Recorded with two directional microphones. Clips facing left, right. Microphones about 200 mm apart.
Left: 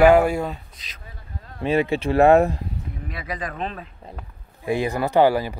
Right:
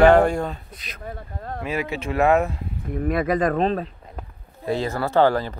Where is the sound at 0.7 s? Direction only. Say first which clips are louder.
Right 11 dB; 55° right (ahead or behind).